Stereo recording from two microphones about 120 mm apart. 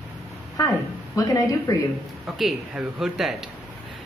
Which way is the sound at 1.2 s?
30° left (ahead or behind).